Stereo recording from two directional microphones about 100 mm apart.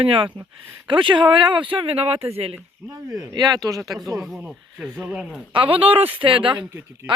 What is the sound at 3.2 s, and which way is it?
Speech, 45° right (ahead or behind).